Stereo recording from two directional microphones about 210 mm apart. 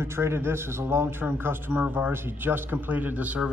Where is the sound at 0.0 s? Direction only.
10° right (ahead or behind).